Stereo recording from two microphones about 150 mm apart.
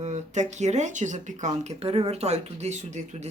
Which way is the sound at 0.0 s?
50° right (ahead or behind).